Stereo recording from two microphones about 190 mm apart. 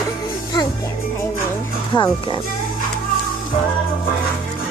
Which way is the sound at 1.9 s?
25° left (ahead or behind).